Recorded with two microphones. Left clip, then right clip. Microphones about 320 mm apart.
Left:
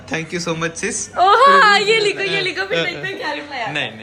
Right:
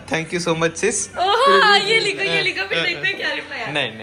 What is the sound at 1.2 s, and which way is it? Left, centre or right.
Speech, left.